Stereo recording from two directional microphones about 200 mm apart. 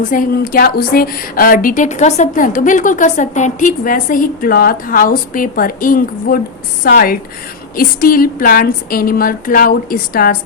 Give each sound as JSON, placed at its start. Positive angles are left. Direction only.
{"t": 0.0, "sound": "a woman's voice", "side_deg": 45}